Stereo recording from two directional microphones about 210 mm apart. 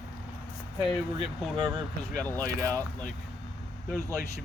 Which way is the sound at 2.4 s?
15° right (ahead or behind).